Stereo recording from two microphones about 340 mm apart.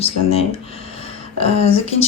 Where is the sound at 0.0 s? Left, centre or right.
Centre.